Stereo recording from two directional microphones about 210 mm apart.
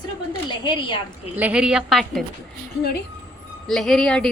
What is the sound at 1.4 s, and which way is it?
Speech, 5° right (ahead or behind).